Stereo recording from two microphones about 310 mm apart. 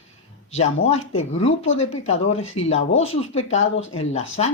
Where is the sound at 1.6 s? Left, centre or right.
Left.